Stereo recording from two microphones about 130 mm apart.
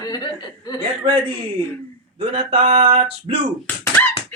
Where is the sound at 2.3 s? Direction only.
45° right (ahead or behind).